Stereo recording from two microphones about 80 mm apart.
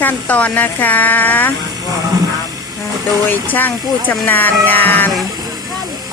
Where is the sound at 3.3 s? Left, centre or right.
Left.